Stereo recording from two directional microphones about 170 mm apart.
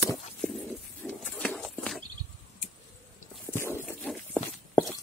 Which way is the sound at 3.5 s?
15° left (ahead or behind).